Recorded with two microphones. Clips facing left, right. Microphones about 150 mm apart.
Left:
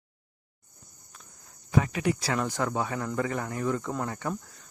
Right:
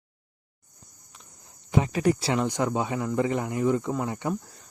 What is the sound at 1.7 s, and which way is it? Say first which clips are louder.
Speech: right 3 dB; 25° right (ahead or behind).